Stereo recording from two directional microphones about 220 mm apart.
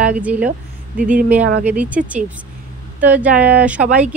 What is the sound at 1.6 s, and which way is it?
Speech, 5° right (ahead or behind).